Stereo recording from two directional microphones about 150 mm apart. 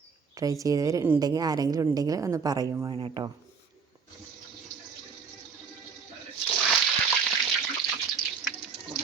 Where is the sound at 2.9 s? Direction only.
35° right (ahead or behind).